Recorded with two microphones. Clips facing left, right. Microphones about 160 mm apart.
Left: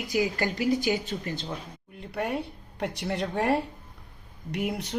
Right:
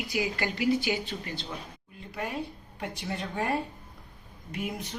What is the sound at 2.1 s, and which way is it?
A woman's voice, 60° left (ahead or behind).